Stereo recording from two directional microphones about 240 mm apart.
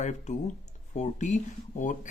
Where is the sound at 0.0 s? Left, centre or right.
Left.